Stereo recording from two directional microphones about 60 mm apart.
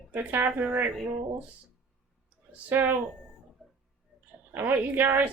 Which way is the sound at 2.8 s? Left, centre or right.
Right.